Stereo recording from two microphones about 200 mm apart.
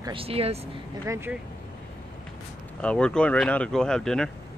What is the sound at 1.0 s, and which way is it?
Speech, 15° right (ahead or behind).